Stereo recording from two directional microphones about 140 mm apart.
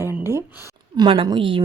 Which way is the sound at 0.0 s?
15° right (ahead or behind).